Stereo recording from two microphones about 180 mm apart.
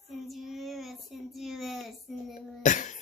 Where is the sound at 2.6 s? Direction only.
45° left (ahead or behind).